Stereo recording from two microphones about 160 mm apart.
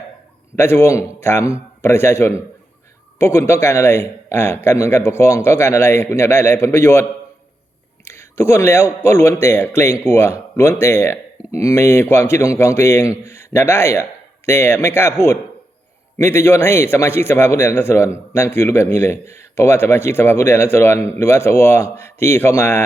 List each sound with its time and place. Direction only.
0.5 s a man's voice: 15° left (ahead or behind)
8.0 s a man's voice: 15° left (ahead or behind)